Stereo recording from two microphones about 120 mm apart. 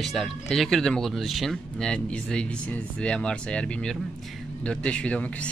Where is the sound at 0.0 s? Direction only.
Centre (ahead or behind).